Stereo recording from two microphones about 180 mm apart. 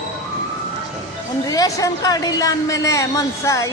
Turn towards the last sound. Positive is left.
turn(degrees=15)  # may be behind; listen again after turning